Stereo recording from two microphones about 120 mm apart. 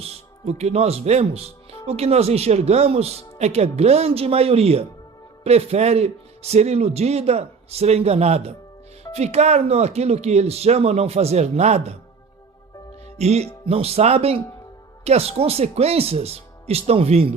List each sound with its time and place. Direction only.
0.0 s speech: 65° right (ahead or behind)
13.1 s speech: 65° right (ahead or behind)